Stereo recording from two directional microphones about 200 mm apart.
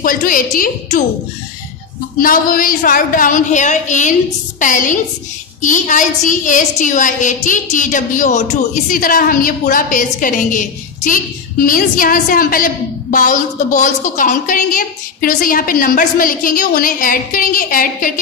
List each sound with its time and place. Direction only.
0.0 s a woman's voice: 45° left (ahead or behind)
2.1 s a woman's voice: 45° left (ahead or behind)